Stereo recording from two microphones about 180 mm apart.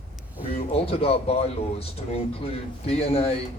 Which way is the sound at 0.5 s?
35° left (ahead or behind).